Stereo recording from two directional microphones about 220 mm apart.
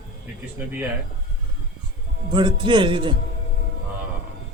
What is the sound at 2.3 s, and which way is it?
Speech, 20° right (ahead or behind).